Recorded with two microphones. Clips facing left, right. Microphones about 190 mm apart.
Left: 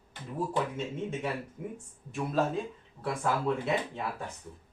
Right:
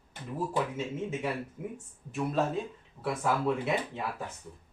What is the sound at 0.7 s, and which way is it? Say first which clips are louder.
Speech: right 1 dB; 5° right (ahead or behind).